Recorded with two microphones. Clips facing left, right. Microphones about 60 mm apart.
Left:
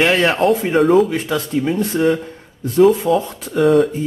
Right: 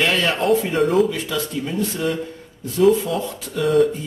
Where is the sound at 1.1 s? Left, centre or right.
Left.